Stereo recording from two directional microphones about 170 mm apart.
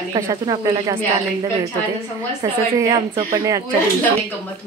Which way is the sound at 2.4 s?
20° right (ahead or behind).